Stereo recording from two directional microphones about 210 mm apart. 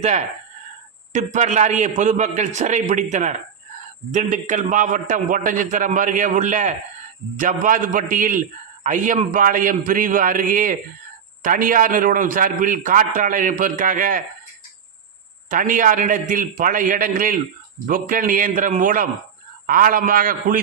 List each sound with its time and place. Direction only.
0.0 s a man's voice: 30° right (ahead or behind)
15.4 s a man's voice: 40° right (ahead or behind)